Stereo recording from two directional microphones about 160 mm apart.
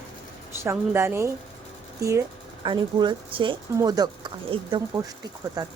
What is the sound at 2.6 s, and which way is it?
A woman's voice, 30° right (ahead or behind).